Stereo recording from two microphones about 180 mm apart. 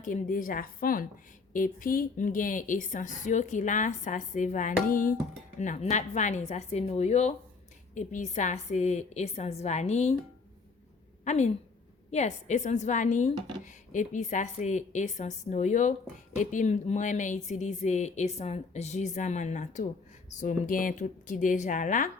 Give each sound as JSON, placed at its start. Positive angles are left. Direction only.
{"t": 0.0, "sound": "a woman's voice", "side_deg": 50}
{"t": 11.3, "sound": "a woman's voice", "side_deg": 40}